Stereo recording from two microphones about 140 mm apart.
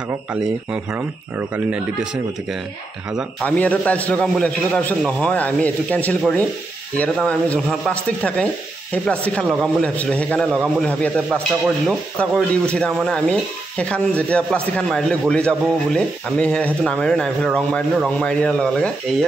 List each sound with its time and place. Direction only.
3.4 s a man's voice: 10° left (ahead or behind)